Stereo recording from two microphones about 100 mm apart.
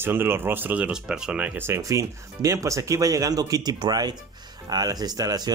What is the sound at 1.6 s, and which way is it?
Speech, 30° right (ahead or behind).